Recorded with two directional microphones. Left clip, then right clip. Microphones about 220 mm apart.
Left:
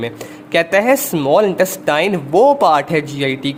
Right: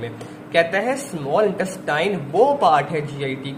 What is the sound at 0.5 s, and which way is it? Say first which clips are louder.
Speech: left 6 dB; 50° left (ahead or behind).